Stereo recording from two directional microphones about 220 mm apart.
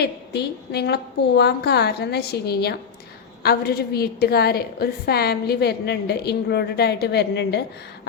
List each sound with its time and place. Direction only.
0.0 s a woman's voice: 50° left (ahead or behind)